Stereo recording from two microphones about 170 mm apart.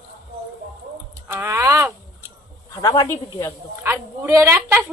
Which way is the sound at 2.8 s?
25° left (ahead or behind).